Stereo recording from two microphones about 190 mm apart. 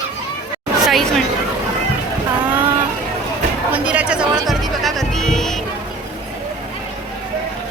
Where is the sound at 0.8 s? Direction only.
Centre (ahead or behind).